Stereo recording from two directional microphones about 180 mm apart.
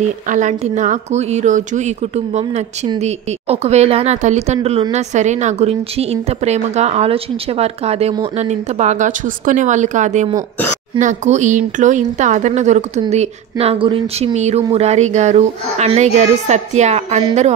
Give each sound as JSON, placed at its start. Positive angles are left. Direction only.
{"t": 0.3, "sound": "speech", "side_deg": -45}